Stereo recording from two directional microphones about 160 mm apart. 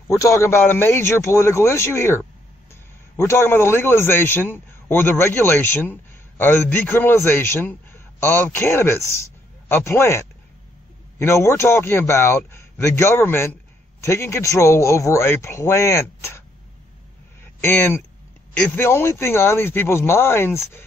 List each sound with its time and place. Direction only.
0.2 s a man's voice: 15° left (ahead or behind)
17.4 s a sound: 15° left (ahead or behind)
18.6 s a man's voice: 15° left (ahead or behind)